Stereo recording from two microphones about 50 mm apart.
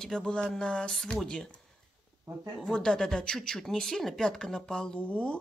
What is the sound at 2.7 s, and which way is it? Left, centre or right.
Speech, centre.